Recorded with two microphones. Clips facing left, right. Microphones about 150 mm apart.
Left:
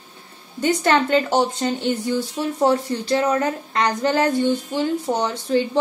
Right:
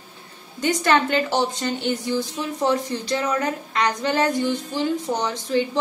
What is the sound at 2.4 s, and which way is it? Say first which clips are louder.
A woman's voice: left 6 dB; 40° left (ahead or behind).